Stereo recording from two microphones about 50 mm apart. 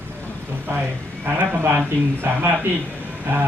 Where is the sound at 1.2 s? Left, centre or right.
Right.